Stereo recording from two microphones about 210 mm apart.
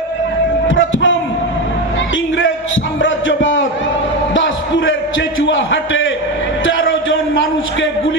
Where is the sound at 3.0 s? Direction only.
65° left (ahead or behind).